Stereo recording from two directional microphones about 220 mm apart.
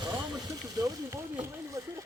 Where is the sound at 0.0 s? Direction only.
15° right (ahead or behind).